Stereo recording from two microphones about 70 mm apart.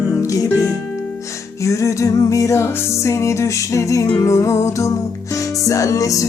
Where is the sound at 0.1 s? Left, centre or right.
Left.